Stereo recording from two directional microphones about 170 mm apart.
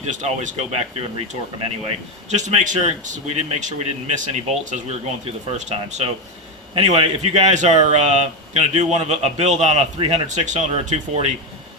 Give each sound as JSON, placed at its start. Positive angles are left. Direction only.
{"t": 0.0, "sound": "speech", "side_deg": -40}